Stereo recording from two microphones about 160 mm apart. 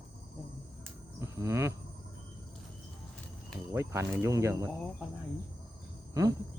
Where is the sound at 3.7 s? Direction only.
15° right (ahead or behind).